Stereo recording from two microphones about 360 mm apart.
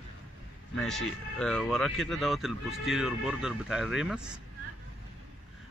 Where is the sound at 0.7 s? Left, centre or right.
Centre.